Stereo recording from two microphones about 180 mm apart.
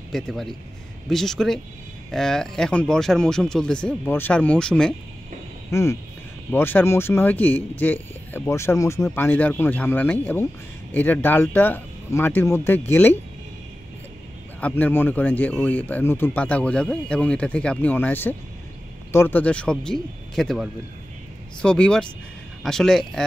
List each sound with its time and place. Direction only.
0.1 s speech: centre (ahead or behind)
5.7 s speech: 15° left (ahead or behind)
14.6 s speech: 10° left (ahead or behind)